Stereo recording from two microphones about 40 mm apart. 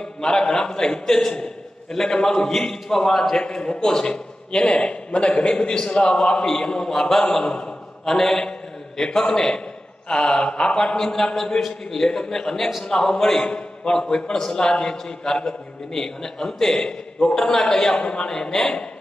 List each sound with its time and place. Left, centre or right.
0.0 s a man's voice: centre
3.4 s a man's voice: left
16.7 s a man's voice: left